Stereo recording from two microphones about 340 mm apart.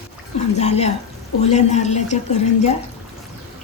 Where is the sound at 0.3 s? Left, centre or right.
Centre.